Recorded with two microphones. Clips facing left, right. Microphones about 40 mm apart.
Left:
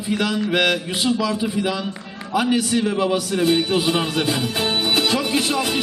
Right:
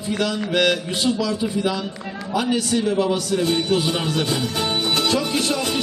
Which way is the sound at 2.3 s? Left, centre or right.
Centre.